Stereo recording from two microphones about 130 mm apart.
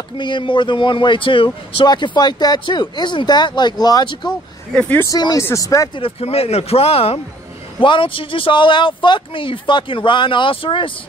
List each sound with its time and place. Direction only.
0.2 s speech: 40° left (ahead or behind)
4.7 s speech: 10° left (ahead or behind)
5.0 s speech: 30° left (ahead or behind)
5.9 s speech: 45° left (ahead or behind)